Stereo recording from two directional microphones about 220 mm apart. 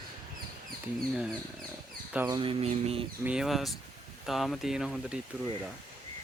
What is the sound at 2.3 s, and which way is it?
Speech, 25° right (ahead or behind).